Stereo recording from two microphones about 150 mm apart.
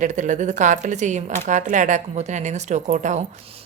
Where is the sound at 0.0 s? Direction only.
55° right (ahead or behind).